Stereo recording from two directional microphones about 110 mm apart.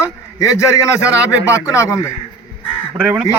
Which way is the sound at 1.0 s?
10° right (ahead or behind).